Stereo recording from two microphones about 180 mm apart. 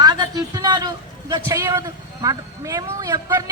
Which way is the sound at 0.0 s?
20° right (ahead or behind).